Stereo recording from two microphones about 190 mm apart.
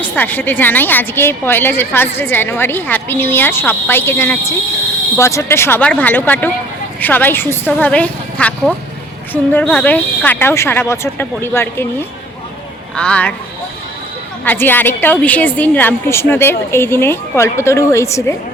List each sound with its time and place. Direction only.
0.0 s a woman's voice: 10° left (ahead or behind)
14.4 s a woman's voice: 10° left (ahead or behind)